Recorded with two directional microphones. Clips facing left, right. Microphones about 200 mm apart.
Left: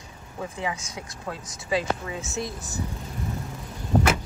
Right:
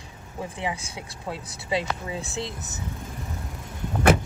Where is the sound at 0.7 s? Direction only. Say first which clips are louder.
Right 1 dB; 30° right (ahead or behind).